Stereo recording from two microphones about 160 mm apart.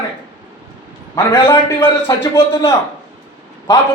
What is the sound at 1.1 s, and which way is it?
A man's voice, 20° left (ahead or behind).